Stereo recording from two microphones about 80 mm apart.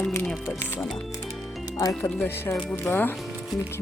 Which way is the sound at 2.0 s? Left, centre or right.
Left.